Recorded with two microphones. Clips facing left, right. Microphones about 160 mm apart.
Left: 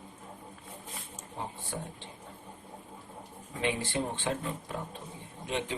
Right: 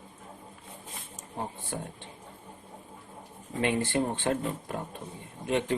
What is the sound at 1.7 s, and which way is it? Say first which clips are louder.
Speech: right 2 dB; 55° right (ahead or behind).